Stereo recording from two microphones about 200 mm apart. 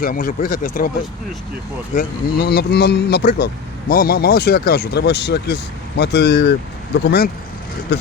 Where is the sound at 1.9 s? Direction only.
50° left (ahead or behind).